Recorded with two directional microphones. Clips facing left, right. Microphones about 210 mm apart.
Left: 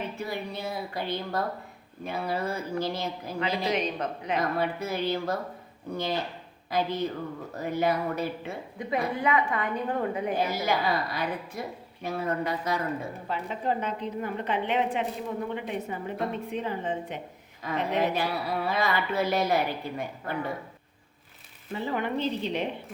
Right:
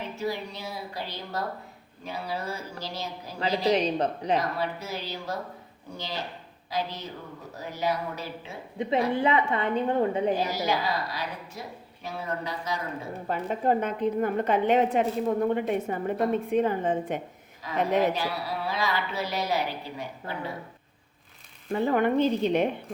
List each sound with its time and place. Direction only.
0.2 s a woman's voice: 55° left (ahead or behind)
3.4 s speech: 35° right (ahead or behind)
4.5 s a woman's voice: 55° left (ahead or behind)
8.8 s a woman's voice: 25° right (ahead or behind)
10.3 s a woman's voice: 55° left (ahead or behind)
13.2 s a woman's voice: 45° right (ahead or behind)
17.6 s speech: 55° left (ahead or behind)
21.7 s a woman's voice: 50° right (ahead or behind)